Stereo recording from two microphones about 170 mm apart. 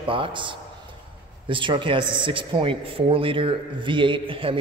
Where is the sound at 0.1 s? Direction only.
30° right (ahead or behind).